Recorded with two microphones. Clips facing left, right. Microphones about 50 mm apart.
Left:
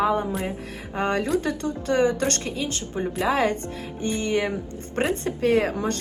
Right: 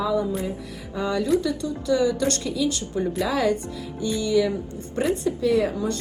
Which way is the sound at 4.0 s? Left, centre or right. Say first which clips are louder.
Right 3 dB; left.